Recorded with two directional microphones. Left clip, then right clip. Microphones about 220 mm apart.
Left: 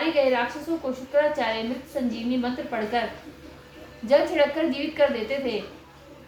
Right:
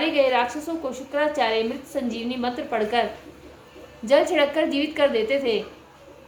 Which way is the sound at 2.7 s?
45° right (ahead or behind).